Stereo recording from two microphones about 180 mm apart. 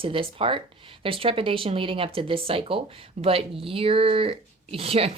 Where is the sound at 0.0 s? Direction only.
30° right (ahead or behind).